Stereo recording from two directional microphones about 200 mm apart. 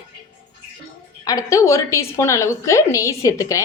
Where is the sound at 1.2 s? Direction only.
15° left (ahead or behind).